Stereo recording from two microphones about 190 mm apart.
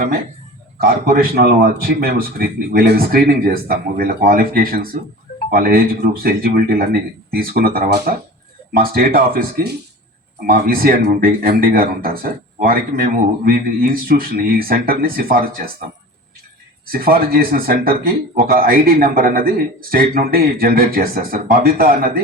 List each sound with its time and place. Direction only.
0.8 s speech: 50° right (ahead or behind)
16.9 s speech: 50° right (ahead or behind)